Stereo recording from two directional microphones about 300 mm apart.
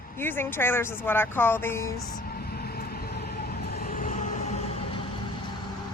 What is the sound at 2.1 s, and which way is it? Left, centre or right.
Vehicle, left.